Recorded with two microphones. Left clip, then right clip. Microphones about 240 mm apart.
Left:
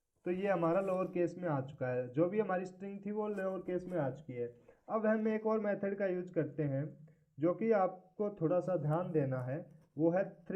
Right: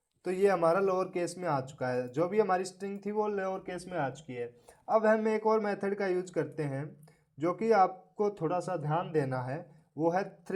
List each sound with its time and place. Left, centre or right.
0.3 s speech: right